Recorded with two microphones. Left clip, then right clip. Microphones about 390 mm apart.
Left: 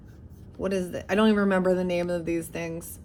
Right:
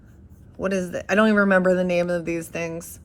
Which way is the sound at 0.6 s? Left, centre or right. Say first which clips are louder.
Right 4 dB; right.